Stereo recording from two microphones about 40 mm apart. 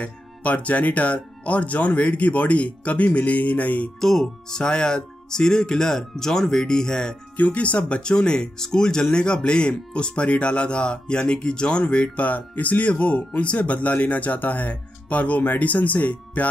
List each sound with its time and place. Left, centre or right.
0.0 s speech: left
4.0 s speech: centre
7.3 s speech: left
8.0 s speech: left
12.2 s speech: left
12.9 s speech: left